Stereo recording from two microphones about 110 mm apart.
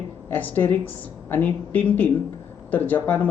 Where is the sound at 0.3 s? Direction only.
20° left (ahead or behind).